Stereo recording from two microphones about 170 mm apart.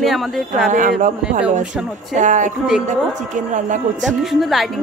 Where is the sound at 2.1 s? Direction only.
45° right (ahead or behind).